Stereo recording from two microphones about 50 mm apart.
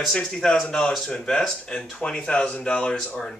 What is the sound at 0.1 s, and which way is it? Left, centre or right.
Speech, centre.